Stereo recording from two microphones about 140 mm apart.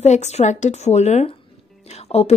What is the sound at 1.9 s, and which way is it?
Music, 50° left (ahead or behind).